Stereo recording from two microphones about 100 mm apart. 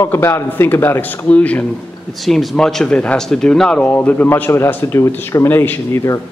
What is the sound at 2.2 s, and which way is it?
Speech, centre (ahead or behind).